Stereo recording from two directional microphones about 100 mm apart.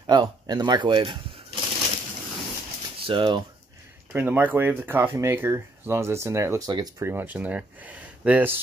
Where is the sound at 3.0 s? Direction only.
60° right (ahead or behind).